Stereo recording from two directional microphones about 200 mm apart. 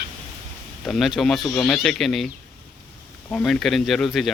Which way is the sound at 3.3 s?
5° left (ahead or behind).